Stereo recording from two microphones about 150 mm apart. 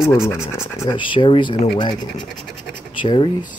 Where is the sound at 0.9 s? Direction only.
35° left (ahead or behind).